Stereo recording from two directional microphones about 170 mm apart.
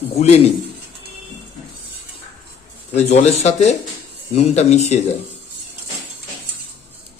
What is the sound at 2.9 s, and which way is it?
A man's voice, 40° left (ahead or behind).